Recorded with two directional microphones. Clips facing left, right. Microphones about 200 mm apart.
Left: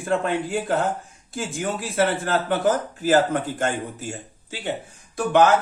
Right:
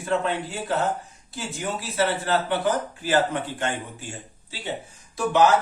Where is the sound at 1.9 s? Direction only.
50° left (ahead or behind).